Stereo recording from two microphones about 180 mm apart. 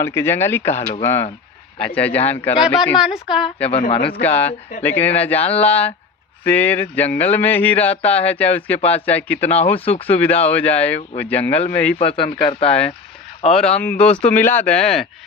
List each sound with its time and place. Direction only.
0.0 s speech: 15° left (ahead or behind)
1.8 s speech: 10° left (ahead or behind)
3.0 s a woman's voice: 5° right (ahead or behind)
3.7 s speech: 35° left (ahead or behind)
4.1 s speech: 10° left (ahead or behind)
9.7 s speech: 30° left (ahead or behind)
10.2 s speech: 10° left (ahead or behind)
11.9 s speech: 30° left (ahead or behind)
13.5 s speech: 5° left (ahead or behind)